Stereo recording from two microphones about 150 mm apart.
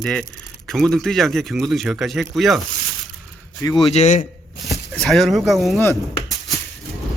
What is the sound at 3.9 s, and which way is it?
Speech, 50° left (ahead or behind).